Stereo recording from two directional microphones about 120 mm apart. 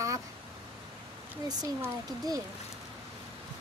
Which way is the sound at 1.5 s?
35° right (ahead or behind).